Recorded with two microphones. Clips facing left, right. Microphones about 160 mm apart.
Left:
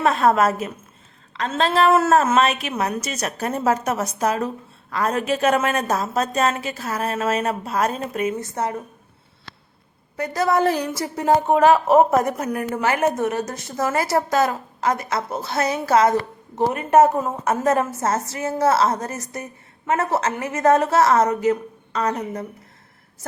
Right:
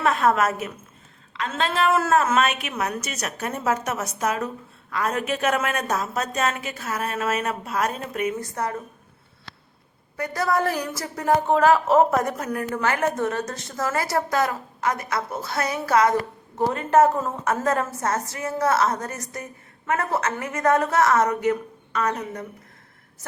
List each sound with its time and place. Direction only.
0.0 s a woman's voice: 30° left (ahead or behind)
10.2 s speech: 25° left (ahead or behind)